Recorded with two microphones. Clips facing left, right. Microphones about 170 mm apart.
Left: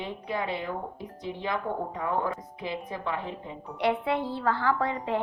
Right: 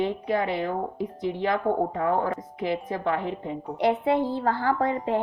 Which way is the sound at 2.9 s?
45° right (ahead or behind).